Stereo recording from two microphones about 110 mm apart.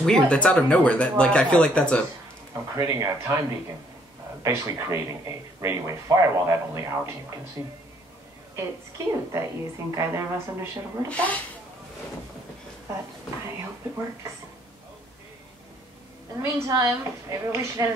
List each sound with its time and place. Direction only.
0.0 s speech: 10° left (ahead or behind)
2.5 s speech: 25° right (ahead or behind)
11.1 s speech: 15° left (ahead or behind)
16.4 s speech: 30° right (ahead or behind)